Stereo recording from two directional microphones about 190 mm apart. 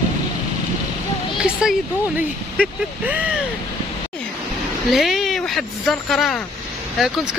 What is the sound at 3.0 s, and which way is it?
Speech, 10° right (ahead or behind).